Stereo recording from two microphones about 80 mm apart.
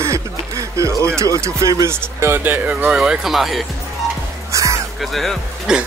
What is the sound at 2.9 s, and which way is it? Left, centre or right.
Speech, centre.